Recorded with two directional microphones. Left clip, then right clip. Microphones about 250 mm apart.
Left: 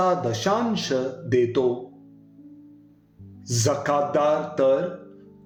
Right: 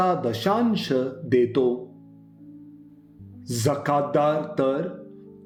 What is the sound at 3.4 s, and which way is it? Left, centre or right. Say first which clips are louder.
A man's voice: left 1 dB; right.